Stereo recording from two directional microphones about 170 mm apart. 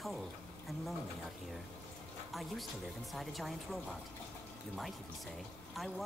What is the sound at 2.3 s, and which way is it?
Speech, centre (ahead or behind).